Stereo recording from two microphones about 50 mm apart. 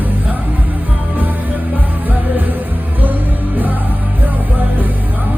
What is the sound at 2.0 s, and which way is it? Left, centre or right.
Music, right.